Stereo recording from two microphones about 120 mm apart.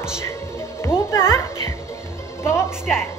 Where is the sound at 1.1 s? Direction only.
20° left (ahead or behind).